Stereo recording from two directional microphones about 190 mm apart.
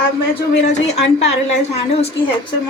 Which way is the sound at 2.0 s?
30° left (ahead or behind).